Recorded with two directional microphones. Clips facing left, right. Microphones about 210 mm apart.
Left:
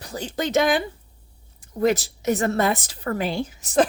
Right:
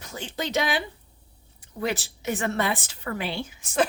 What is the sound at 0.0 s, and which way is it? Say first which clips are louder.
A woman's voice: left 5 dB; 35° left (ahead or behind).